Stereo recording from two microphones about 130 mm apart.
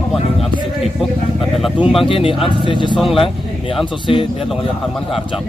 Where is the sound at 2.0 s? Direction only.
45° left (ahead or behind).